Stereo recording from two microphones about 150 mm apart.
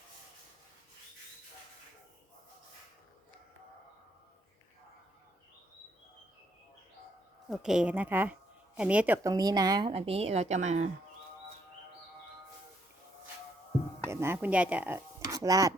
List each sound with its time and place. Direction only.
7.5 s speech: 5° right (ahead or behind); by 9.9 s 25° right (ahead or behind)
9.9 s a woman's voice: 40° right (ahead or behind)
14.1 s speech: 15° right (ahead or behind)